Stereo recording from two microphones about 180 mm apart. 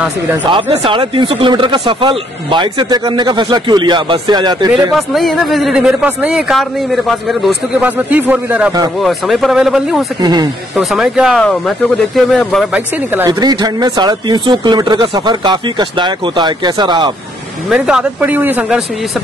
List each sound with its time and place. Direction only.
0.5 s speech: 30° right (ahead or behind)
4.9 s speech: centre (ahead or behind)
10.2 s speech: 20° right (ahead or behind)
10.8 s speech: centre (ahead or behind)
12.7 s speech: 10° right (ahead or behind)
13.3 s speech: 25° right (ahead or behind)
17.6 s speech: 5° right (ahead or behind)